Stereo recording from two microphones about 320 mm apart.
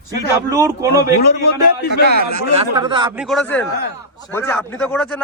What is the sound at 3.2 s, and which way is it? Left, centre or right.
Speech, centre.